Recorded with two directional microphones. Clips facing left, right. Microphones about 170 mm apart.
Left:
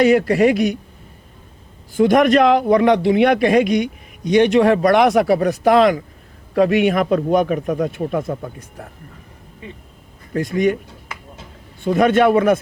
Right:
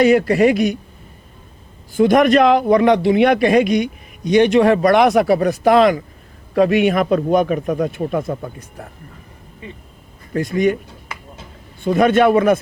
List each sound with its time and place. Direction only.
0.0 s a man's voice: 15° right (ahead or behind)
2.0 s a man's voice: 15° right (ahead or behind)
10.3 s a man's voice: 15° right (ahead or behind)